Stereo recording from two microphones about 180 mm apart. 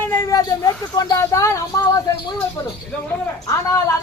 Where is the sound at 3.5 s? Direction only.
15° left (ahead or behind).